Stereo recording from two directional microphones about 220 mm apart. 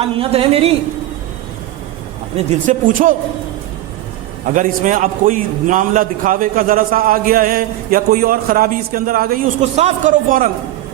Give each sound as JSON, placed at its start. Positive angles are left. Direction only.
{"t": 0.0, "sound": "speech", "side_deg": -25}
{"t": 2.5, "sound": "a man's voice", "side_deg": -35}
{"t": 4.5, "sound": "a man's voice", "side_deg": -35}